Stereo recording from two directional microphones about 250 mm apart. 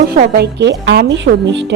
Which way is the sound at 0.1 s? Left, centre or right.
Right.